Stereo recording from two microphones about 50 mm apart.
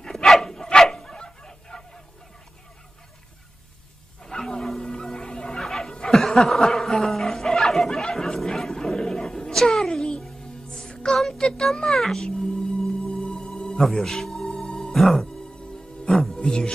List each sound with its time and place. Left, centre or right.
0.0 s dog: centre
4.2 s wild animals: centre
10.2 s music: centre
10.7 s music: centre